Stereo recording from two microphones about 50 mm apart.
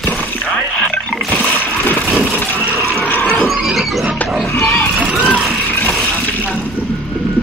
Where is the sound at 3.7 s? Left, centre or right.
Centre.